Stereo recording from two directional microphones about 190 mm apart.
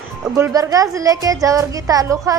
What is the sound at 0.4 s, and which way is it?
A woman's voice, 20° right (ahead or behind).